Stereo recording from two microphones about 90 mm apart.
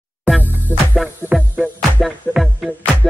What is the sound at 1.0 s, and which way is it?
Music, 10° right (ahead or behind).